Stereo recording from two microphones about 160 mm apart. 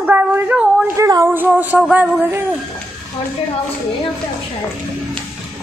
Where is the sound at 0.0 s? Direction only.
10° right (ahead or behind).